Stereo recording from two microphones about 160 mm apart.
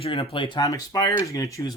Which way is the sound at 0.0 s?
35° left (ahead or behind).